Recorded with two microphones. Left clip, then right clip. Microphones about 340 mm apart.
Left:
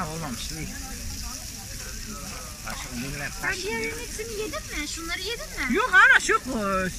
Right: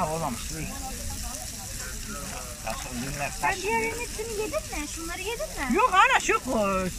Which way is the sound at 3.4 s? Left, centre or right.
Right.